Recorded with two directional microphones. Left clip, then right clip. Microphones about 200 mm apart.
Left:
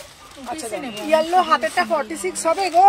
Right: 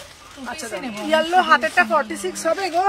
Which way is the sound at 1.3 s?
25° right (ahead or behind).